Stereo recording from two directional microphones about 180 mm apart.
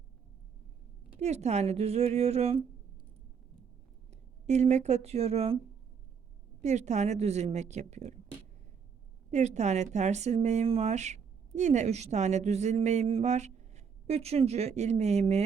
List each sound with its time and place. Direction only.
1.1 s speech: 40° right (ahead or behind)
4.1 s speech: 40° right (ahead or behind)
6.6 s speech: 40° right (ahead or behind)
9.3 s speech: 40° right (ahead or behind)